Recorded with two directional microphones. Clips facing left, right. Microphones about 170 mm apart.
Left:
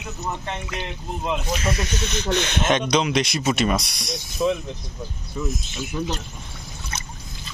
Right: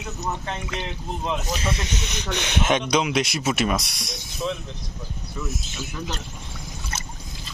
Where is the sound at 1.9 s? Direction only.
15° right (ahead or behind).